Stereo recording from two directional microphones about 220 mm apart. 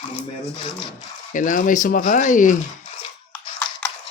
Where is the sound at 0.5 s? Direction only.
25° left (ahead or behind).